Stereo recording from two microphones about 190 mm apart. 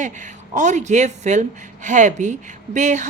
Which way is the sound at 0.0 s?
40° right (ahead or behind).